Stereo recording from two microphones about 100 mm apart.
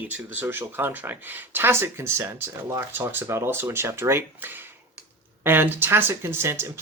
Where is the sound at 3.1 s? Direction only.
20° right (ahead or behind).